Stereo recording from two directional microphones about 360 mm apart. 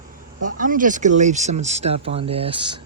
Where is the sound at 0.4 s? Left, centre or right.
Right.